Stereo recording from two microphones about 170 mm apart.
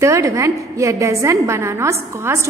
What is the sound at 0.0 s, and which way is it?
A woman's voice, 20° right (ahead or behind).